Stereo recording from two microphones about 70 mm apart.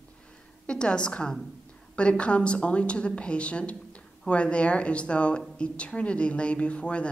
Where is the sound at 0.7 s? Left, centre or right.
Centre.